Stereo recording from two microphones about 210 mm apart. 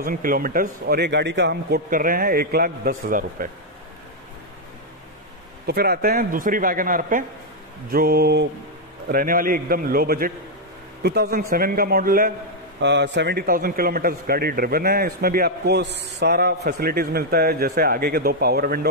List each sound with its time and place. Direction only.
0.0 s a man's voice: 40° right (ahead or behind)
5.7 s a man's voice: 50° right (ahead or behind)
12.8 s a man's voice: 55° right (ahead or behind)